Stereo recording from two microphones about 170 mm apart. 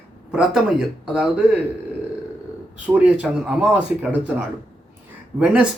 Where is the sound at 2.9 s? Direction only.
5° right (ahead or behind).